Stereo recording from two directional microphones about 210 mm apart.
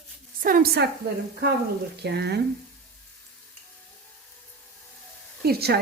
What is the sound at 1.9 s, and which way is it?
Speech, 50° right (ahead or behind).